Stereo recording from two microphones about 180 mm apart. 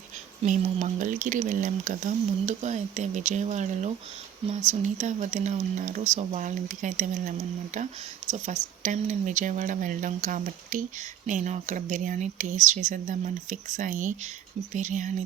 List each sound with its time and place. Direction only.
0.4 s speech: 45° right (ahead or behind)